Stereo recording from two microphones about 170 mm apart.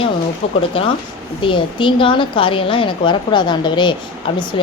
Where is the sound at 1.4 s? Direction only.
30° left (ahead or behind).